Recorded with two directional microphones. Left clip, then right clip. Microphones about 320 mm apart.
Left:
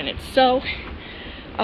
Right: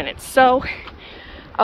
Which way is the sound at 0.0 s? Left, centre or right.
Right.